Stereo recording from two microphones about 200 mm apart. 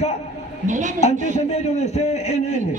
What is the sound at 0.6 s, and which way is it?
Speech, 40° right (ahead or behind).